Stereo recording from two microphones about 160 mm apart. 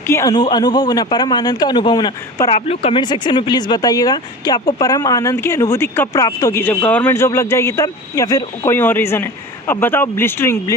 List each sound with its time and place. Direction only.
0.1 s speech: 20° left (ahead or behind)
2.6 s speech: 40° left (ahead or behind); by 10.8 s 15° left (ahead or behind)